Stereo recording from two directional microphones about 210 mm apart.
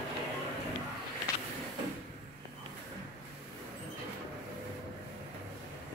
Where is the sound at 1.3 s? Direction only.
15° left (ahead or behind).